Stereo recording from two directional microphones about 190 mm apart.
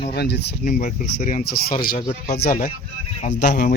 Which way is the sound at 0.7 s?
45° left (ahead or behind).